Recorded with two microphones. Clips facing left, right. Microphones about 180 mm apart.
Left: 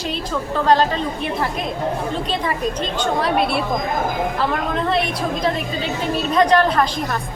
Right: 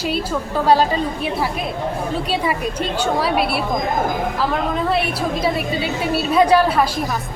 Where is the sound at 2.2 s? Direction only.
10° right (ahead or behind).